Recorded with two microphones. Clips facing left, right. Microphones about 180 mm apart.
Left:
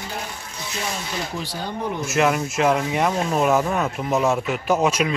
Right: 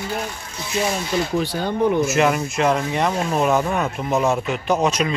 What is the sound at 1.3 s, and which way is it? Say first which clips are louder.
Speech: right 7 dB; 55° right (ahead or behind).